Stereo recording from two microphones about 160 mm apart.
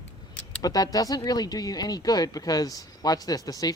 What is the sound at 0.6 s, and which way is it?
Speech, 25° left (ahead or behind).